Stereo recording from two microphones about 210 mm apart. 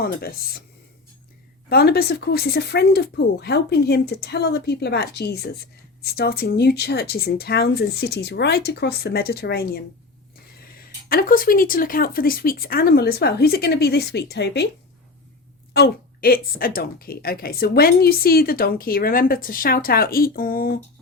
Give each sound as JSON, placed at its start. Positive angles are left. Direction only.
{"t": 0.0, "sound": "speech", "side_deg": 45}
{"t": 1.7, "sound": "speech", "side_deg": 45}
{"t": 11.1, "sound": "speech", "side_deg": 45}
{"t": 15.7, "sound": "speech", "side_deg": 50}